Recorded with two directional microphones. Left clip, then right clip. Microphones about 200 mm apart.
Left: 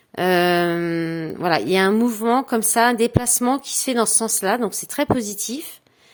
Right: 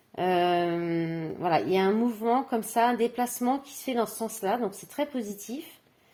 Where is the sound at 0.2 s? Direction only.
35° left (ahead or behind).